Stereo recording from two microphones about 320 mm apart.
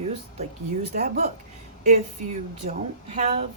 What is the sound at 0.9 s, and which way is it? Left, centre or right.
Speech, right.